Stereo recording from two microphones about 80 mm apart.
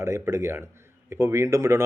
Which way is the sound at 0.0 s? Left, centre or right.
Right.